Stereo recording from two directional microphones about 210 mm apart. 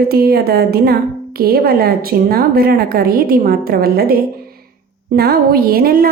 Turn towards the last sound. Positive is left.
turn(degrees=-45)  # may be behind; listen again after turning